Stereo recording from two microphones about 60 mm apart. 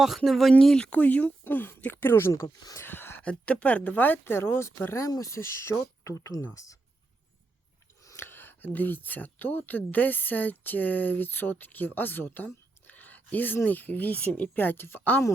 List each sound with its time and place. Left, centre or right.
0.3 s speech: centre
0.9 s speech: left
2.8 s a sound: left
3.2 s speech: left
4.9 s speech: left
8.1 s speech: left
12.9 s a sound: left
13.7 s speech: left